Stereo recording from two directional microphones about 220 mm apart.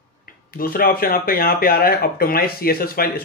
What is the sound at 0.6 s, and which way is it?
Speech, 40° left (ahead or behind).